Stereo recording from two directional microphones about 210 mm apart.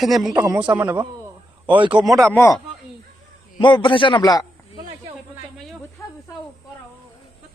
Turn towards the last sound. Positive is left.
turn(degrees=15)  # may be behind; listen again after turning